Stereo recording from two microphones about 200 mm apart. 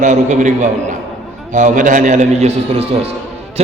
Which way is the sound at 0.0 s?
40° right (ahead or behind).